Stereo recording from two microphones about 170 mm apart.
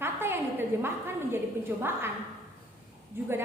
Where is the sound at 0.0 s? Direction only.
15° right (ahead or behind).